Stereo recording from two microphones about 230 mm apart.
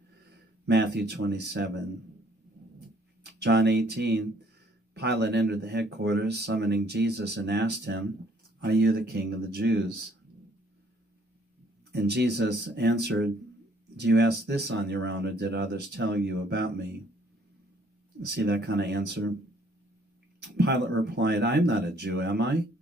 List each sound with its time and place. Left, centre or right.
0.7 s speech: right
3.3 s speech: right
11.9 s speech: right
18.2 s speech: right
20.4 s speech: right